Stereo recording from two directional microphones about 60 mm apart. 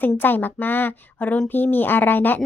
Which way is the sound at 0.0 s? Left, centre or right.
Left.